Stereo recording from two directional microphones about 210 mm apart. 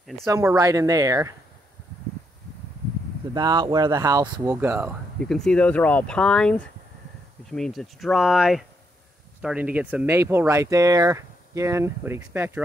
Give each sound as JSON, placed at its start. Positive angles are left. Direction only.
{"t": 0.3, "sound": "speech", "side_deg": -15}
{"t": 3.3, "sound": "speech", "side_deg": -20}
{"t": 5.2, "sound": "speech", "side_deg": 5}